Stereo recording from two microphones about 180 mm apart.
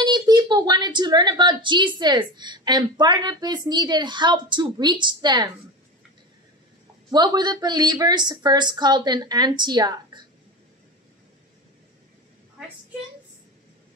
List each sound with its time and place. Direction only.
0.0 s a woman's voice: 25° right (ahead or behind)
7.1 s a woman's voice: 25° right (ahead or behind)